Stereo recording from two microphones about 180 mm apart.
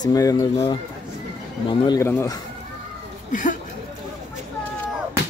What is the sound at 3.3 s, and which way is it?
Speech, 45° left (ahead or behind).